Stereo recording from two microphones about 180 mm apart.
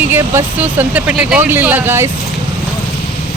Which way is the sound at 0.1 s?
10° right (ahead or behind).